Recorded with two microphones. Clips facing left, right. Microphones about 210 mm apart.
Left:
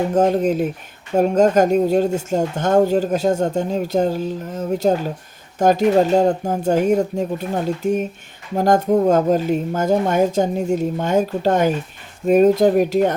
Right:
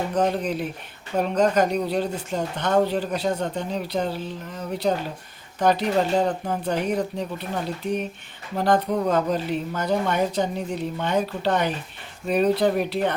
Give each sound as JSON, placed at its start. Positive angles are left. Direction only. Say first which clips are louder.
{"t": 0.1, "sound": "speech", "louder": "left 7 dB", "side_deg": 45}